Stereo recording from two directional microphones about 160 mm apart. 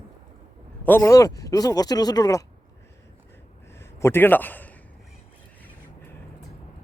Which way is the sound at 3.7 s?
15° left (ahead or behind).